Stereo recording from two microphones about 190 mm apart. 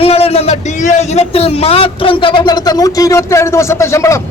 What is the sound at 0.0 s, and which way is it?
A man's voice, 30° left (ahead or behind).